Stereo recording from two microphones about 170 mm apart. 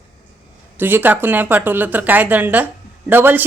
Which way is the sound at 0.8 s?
10° right (ahead or behind).